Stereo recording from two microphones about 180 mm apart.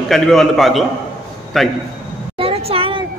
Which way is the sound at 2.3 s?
30° right (ahead or behind).